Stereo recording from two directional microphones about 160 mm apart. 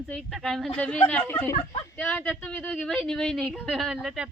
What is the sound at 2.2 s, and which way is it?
Speech, centre (ahead or behind).